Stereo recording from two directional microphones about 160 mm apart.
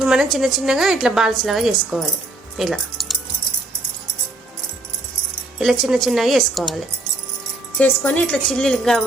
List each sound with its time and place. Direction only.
0.0 s a woman's voice: 5° right (ahead or behind)
5.5 s a woman's voice: centre (ahead or behind)